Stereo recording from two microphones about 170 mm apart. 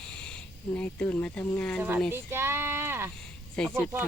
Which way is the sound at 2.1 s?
15° right (ahead or behind).